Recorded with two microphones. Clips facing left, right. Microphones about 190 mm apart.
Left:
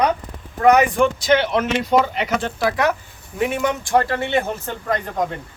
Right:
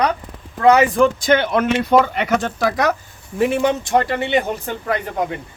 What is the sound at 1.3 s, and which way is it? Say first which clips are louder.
Speech: right 2 dB; 50° right (ahead or behind).